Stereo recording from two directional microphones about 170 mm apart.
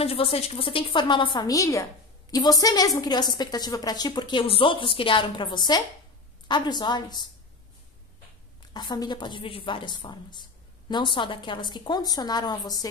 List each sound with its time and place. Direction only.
0.0 s a woman's voice: 35° left (ahead or behind)
8.7 s a woman's voice: 25° left (ahead or behind)